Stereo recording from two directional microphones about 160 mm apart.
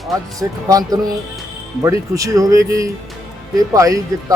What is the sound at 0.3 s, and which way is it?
Speech, 25° right (ahead or behind).